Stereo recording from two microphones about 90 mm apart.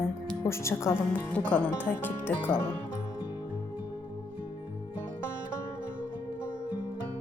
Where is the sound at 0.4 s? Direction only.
30° left (ahead or behind).